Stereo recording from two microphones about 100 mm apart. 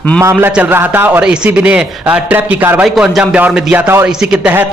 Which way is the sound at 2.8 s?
10° right (ahead or behind).